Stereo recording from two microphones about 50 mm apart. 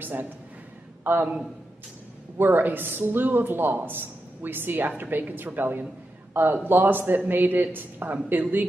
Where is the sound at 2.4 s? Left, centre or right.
Right.